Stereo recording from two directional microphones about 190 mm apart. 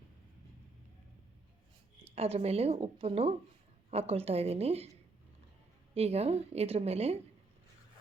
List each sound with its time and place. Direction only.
2.1 s a woman's voice: 30° right (ahead or behind)
5.9 s a woman's voice: 35° right (ahead or behind)